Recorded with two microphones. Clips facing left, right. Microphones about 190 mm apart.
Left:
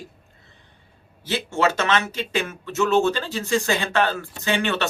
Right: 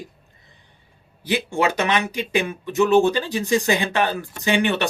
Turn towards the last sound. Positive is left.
turn(degrees=-15)  # may be behind; listen again after turning